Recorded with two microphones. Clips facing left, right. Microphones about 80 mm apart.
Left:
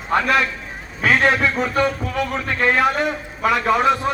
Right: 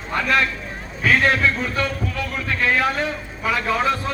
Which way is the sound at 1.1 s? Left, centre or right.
Left.